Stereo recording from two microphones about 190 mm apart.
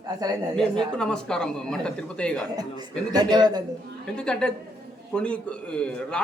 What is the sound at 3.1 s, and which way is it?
Speech, 20° right (ahead or behind).